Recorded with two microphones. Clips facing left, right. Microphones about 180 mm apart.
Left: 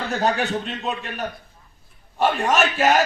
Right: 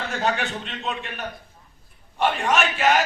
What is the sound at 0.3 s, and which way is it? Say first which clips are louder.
Speech: left 5 dB; 40° left (ahead or behind).